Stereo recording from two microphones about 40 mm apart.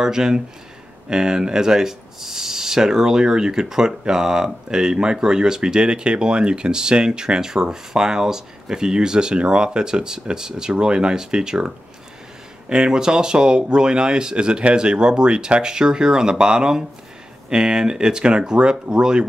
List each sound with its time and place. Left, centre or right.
0.0 s speech: centre